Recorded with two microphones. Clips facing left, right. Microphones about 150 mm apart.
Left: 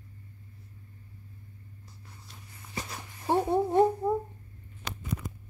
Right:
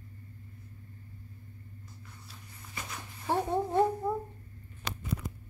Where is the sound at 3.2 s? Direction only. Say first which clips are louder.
Left 4 dB; 15° left (ahead or behind).